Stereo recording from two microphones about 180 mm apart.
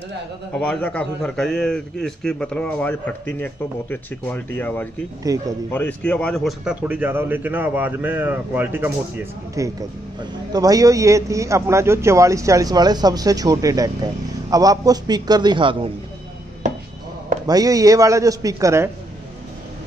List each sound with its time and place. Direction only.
0.6 s a man's voice: 5° left (ahead or behind)
5.3 s a man's voice: 20° right (ahead or behind)
5.7 s a man's voice: 10° left (ahead or behind); by 15.9 s 30° right (ahead or behind)
17.5 s a man's voice: 20° right (ahead or behind)